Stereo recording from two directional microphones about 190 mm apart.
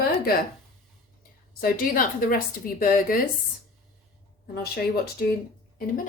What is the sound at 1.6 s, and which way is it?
Speech, 50° left (ahead or behind).